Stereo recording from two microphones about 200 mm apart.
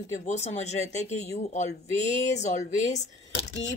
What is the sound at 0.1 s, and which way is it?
Speech, 35° left (ahead or behind).